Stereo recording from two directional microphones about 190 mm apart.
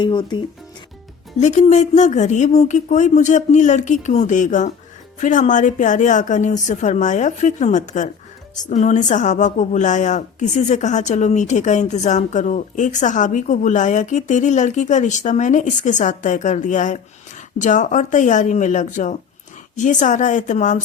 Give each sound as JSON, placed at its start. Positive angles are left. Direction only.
{"t": 0.0, "sound": "speech", "side_deg": 25}
{"t": 1.4, "sound": "speech", "side_deg": 40}